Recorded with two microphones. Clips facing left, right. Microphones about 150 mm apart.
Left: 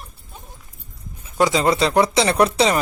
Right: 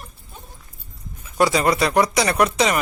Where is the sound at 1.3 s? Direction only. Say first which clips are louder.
Left 1 dB; 20° left (ahead or behind).